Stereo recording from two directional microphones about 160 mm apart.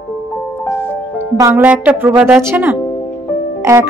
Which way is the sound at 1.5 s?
10° right (ahead or behind).